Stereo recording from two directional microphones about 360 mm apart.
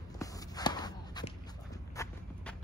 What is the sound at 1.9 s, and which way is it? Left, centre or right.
Clip-clop, centre.